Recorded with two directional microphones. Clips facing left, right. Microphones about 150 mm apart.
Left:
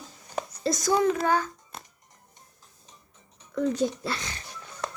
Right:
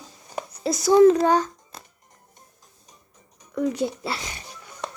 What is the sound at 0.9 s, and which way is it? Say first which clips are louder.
Speech: right 12 dB; 40° right (ahead or behind).